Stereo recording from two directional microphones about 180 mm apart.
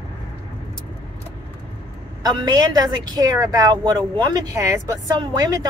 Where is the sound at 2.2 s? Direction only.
20° right (ahead or behind).